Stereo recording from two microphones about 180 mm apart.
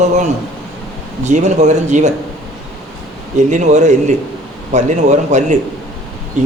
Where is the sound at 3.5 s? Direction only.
40° right (ahead or behind).